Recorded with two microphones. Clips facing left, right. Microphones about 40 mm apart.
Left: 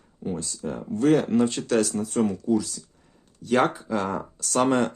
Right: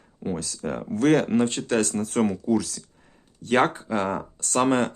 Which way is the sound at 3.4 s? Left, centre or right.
Right.